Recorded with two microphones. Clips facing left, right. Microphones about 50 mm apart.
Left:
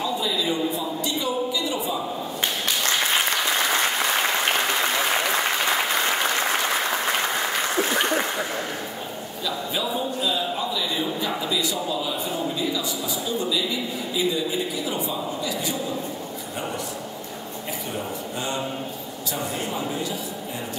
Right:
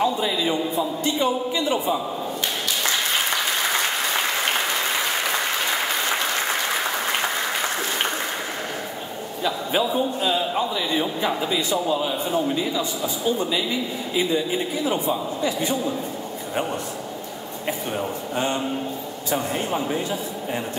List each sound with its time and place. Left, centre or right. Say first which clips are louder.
0.0 s a man's voice: right 3 dB; right
9.4 s a man's voice: right 5 dB; right
18.3 s a man's voice: right 5 dB; right